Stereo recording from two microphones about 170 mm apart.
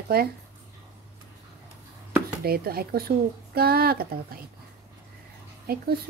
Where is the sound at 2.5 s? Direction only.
65° right (ahead or behind).